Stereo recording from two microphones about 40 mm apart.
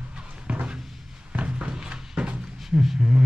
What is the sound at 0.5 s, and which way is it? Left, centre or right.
Cupboard open or close, right.